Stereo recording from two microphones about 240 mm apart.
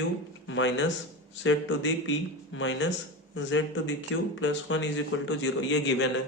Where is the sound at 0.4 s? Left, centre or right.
Left.